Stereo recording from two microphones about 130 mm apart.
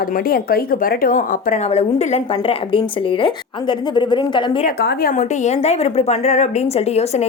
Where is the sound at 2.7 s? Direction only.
40° left (ahead or behind).